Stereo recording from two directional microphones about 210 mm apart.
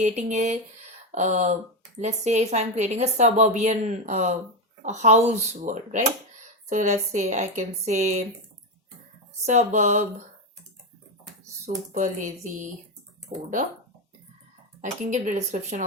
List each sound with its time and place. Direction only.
0.0 s a woman's voice: 35° right (ahead or behind)
9.5 s a woman's voice: 35° right (ahead or behind)
11.9 s a woman's voice: 35° right (ahead or behind)
14.8 s a woman's voice: 35° right (ahead or behind)